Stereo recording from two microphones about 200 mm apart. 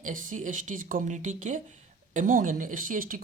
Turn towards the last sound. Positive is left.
turn(degrees=-45)  # may be behind; listen again after turning